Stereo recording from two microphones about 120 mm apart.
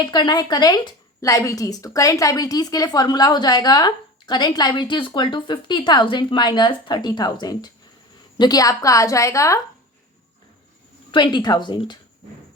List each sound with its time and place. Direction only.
0.0 s a woman's voice: 35° left (ahead or behind)
11.1 s a woman's voice: 40° left (ahead or behind)